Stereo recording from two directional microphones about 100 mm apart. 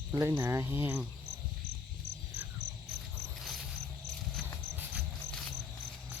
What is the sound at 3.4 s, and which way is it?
Cricket, centre (ahead or behind).